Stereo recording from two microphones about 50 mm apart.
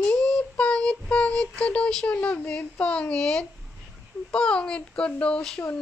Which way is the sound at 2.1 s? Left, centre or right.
Left.